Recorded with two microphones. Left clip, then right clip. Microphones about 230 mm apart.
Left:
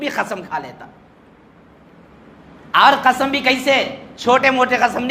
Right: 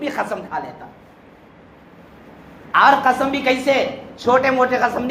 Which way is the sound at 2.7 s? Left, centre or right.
Left.